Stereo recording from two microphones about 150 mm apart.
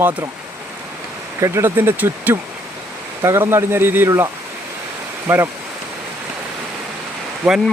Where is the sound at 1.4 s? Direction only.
15° right (ahead or behind).